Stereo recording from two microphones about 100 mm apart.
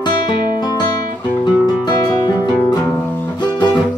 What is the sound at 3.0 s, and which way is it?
Music, 20° left (ahead or behind).